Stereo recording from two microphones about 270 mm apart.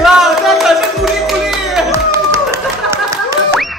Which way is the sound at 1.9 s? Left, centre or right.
Centre.